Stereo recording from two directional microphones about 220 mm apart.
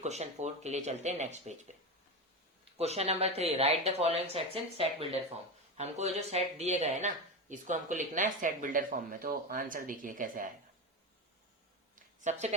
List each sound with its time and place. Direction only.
0.0 s speech: 30° right (ahead or behind)
2.7 s speech: 30° right (ahead or behind)
11.9 s a sound: 30° right (ahead or behind)